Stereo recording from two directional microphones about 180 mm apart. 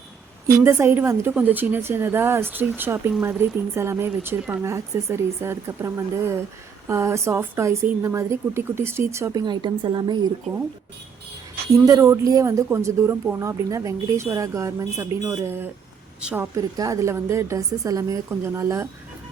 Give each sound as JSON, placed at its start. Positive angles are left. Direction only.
{"t": 0.6, "sound": "speech", "side_deg": -15}
{"t": 11.9, "sound": "speech", "side_deg": -15}